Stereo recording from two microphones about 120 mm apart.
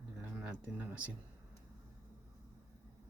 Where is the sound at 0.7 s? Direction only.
10° right (ahead or behind).